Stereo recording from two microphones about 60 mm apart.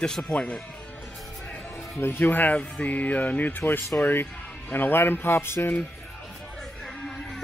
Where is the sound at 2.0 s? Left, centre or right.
Left.